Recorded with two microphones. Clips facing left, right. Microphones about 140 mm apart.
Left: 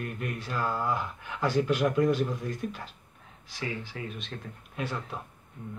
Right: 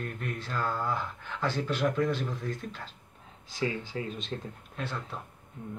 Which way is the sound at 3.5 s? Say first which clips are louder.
Right 4 dB; 25° right (ahead or behind).